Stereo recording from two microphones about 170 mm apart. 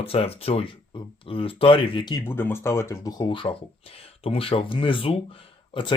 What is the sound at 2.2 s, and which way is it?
Speech, 15° left (ahead or behind).